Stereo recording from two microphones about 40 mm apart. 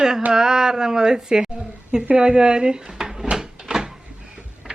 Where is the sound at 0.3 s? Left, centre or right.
Centre.